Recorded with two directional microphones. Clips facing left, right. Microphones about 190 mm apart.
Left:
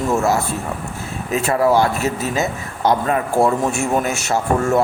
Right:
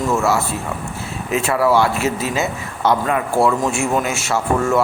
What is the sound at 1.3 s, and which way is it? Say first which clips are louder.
A man's voice: even; 40° left (ahead or behind).